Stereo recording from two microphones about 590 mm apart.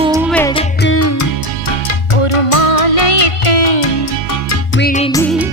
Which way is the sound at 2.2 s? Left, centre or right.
Left.